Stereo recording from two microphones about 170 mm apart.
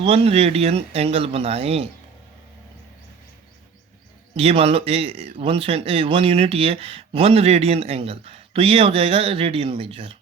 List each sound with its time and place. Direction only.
0.0 s speech: 35° right (ahead or behind)
4.4 s speech: 35° right (ahead or behind)